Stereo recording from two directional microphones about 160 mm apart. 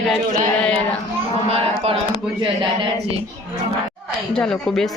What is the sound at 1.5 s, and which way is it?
Speech, 40° right (ahead or behind).